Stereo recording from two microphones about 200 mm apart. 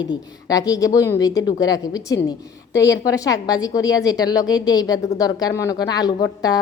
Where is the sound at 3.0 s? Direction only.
15° left (ahead or behind).